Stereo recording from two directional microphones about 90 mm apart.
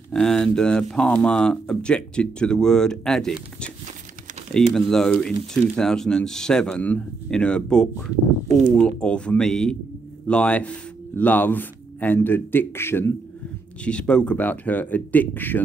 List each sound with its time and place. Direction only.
0.1 s speech: 5° left (ahead or behind); by 13.1 s 25° left (ahead or behind)
13.8 s speech: 10° left (ahead or behind)